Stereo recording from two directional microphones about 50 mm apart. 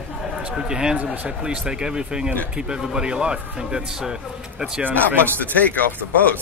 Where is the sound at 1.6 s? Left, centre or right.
Centre.